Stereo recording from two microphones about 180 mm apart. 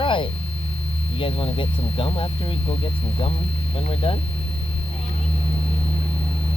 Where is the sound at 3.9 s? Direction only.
30° left (ahead or behind).